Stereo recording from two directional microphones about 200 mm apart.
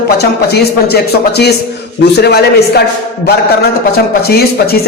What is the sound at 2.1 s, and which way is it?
Speech, 55° left (ahead or behind).